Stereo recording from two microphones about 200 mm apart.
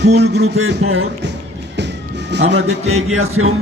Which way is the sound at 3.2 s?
90° right.